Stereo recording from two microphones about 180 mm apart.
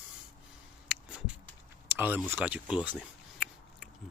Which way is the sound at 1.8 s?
10° right (ahead or behind).